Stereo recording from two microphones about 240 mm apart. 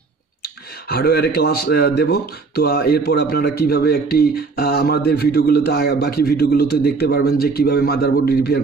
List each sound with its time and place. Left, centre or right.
0.4 s speech: left